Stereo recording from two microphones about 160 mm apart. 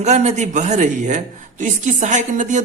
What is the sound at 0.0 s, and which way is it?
A man's voice, 45° right (ahead or behind).